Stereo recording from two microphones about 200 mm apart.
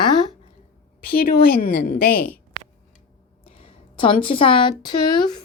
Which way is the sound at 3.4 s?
25° left (ahead or behind).